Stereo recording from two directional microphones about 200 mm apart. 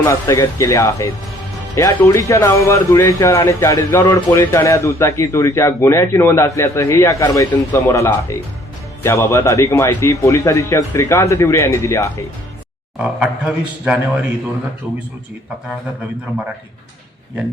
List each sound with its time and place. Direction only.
0.0 s speech: 15° left (ahead or behind)
13.0 s speech: 5° right (ahead or behind)